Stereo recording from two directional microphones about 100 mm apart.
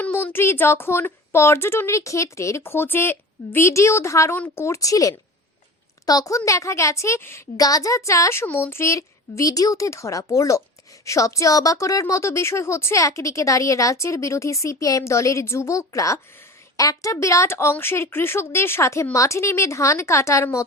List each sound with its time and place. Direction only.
0.0 s a woman's voice: 20° left (ahead or behind)
7.5 s a woman's voice: 35° left (ahead or behind)